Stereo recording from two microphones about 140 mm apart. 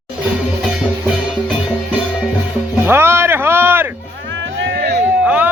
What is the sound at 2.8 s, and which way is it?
Music, 15° right (ahead or behind).